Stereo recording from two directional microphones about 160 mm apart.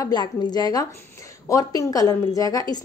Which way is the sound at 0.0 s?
25° left (ahead or behind).